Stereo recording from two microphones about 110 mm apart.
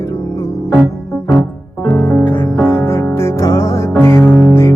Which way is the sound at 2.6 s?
25° left (ahead or behind).